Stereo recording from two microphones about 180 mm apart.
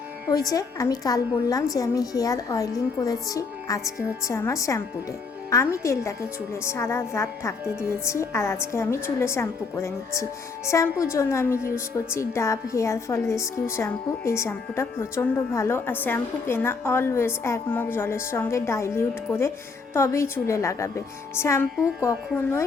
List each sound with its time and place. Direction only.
0.5 s a woman's voice: 20° left (ahead or behind)